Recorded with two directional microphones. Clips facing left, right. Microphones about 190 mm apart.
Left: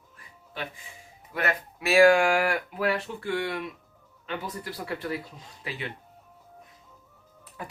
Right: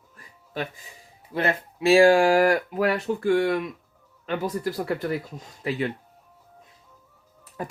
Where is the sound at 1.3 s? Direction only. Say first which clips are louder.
Right 4 dB; 30° right (ahead or behind); by 3.6 s 45° right (ahead or behind).